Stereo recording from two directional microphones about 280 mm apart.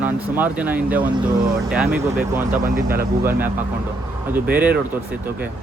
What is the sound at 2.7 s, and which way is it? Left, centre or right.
Speech, right.